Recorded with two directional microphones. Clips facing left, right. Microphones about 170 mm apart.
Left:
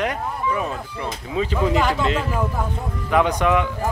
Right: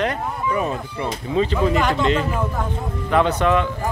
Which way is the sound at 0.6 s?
Centre (ahead or behind).